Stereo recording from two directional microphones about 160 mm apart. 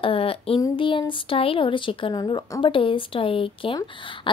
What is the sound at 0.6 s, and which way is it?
Speech, 30° left (ahead or behind).